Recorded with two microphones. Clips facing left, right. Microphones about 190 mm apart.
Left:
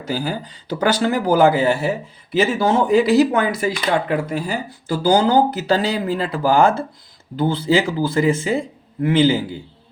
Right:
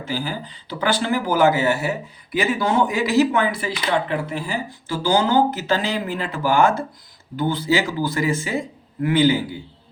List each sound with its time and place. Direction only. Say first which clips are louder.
0.0 s speech: left 3 dB; 40° left (ahead or behind); by 9.4 s 25° left (ahead or behind)